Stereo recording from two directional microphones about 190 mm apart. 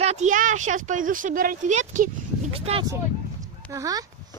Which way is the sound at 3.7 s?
15° right (ahead or behind).